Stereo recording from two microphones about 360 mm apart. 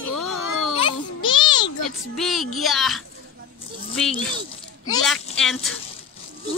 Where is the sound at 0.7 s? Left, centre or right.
Centre.